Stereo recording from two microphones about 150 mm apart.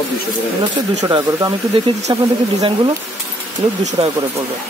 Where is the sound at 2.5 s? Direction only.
35° right (ahead or behind).